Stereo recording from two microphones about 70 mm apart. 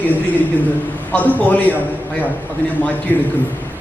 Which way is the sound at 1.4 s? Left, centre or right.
Left.